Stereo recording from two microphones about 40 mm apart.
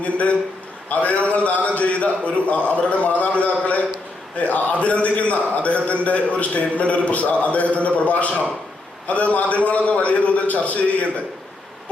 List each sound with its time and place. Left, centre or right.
0.0 s a man's voice: left